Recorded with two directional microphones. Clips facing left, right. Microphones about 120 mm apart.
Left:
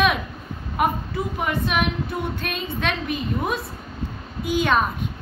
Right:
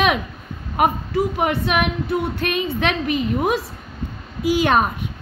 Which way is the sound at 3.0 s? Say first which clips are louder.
Right 5 dB; 70° right (ahead or behind).